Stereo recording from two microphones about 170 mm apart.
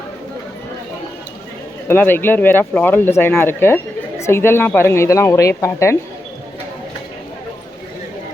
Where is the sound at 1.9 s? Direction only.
10° left (ahead or behind).